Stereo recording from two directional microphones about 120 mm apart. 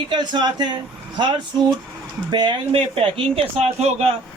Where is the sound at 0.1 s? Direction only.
40° right (ahead or behind).